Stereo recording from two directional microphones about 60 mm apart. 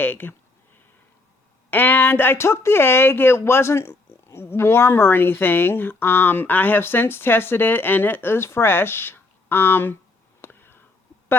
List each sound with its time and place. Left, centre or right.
0.0 s speech: left
1.7 s speech: left
10.4 s a sound: left